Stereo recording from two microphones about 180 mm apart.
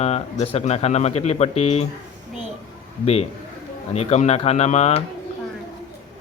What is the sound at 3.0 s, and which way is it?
Speech, 35° left (ahead or behind).